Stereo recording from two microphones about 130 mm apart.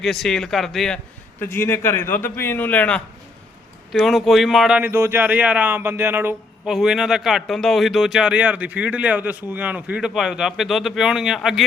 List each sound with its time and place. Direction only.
0.0 s a man's voice: 5° left (ahead or behind)
1.4 s a man's voice: 15° left (ahead or behind)
3.9 s a man's voice: centre (ahead or behind)
4.8 s speech: 20° right (ahead or behind)
6.7 s a man's voice: 5° right (ahead or behind)